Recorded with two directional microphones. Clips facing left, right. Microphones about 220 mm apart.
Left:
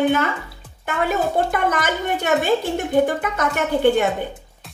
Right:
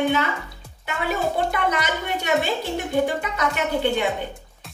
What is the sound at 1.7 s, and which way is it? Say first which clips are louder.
Speech: left 3 dB; 50° left (ahead or behind).